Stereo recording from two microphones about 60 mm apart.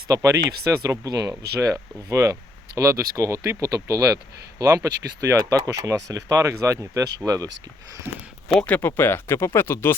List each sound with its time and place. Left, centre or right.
0.1 s speech: right
0.8 s speech: right
1.4 s speech: right
4.5 s speech: right
7.3 s speech: right
8.6 s speech: left
9.0 s speech: left